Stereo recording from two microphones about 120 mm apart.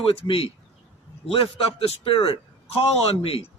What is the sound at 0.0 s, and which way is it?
A man's voice, 50° left (ahead or behind).